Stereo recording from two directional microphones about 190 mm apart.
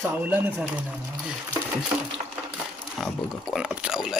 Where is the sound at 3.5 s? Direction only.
5° right (ahead or behind).